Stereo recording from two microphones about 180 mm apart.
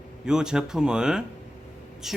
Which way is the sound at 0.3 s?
5° right (ahead or behind).